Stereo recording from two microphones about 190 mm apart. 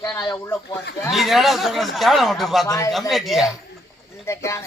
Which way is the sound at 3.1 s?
Centre (ahead or behind).